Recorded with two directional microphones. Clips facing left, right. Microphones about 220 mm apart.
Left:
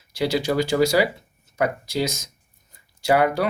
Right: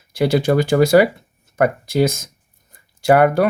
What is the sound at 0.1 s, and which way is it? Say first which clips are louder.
Speech: right 6 dB; 55° right (ahead or behind).